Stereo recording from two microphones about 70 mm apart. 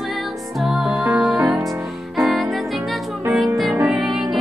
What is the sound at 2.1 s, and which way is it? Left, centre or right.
Music, centre.